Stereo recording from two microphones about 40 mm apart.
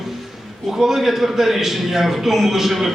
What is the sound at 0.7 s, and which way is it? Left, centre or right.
A man's voice, centre.